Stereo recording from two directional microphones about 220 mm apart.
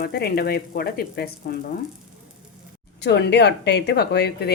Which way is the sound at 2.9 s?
50° left (ahead or behind).